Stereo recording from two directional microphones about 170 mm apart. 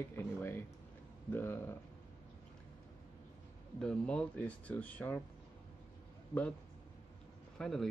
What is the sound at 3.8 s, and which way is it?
Speech, 5° left (ahead or behind).